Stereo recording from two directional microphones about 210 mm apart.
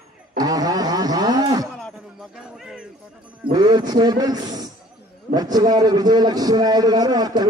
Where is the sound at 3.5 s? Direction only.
20° right (ahead or behind).